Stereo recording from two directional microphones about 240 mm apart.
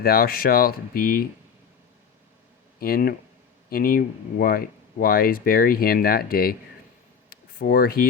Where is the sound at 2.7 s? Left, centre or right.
Left.